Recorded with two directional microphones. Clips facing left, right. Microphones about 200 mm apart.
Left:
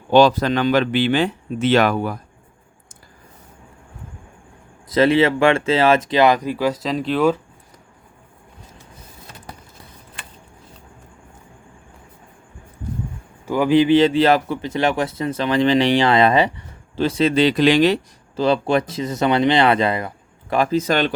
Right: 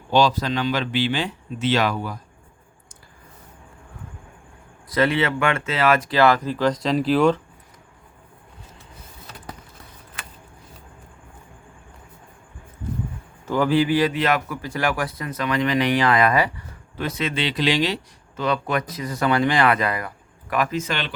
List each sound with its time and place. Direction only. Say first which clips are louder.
0.1 s speech: left 6 dB; 55° left (ahead or behind)
4.9 s speech: left 6 dB; 25° left (ahead or behind); by 7.4 s 5° left (ahead or behind)
13.4 s speech: left 4 dB; 15° left (ahead or behind); by 18.0 s 50° left (ahead or behind)
18.3 s speech: left 6 dB; 30° left (ahead or behind)